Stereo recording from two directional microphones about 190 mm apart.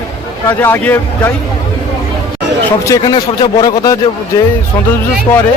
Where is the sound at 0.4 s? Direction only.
10° left (ahead or behind).